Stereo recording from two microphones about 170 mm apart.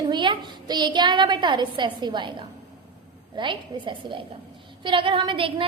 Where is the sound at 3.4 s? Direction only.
30° right (ahead or behind).